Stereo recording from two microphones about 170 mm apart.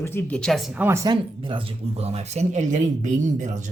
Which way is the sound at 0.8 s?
20° right (ahead or behind).